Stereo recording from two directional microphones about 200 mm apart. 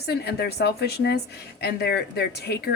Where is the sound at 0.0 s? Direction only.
55° left (ahead or behind).